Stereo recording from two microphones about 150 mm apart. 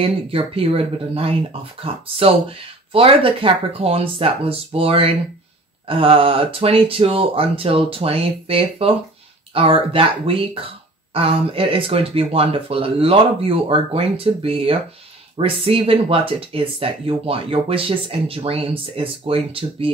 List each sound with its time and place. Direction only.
0.0 s speech: 40° right (ahead or behind)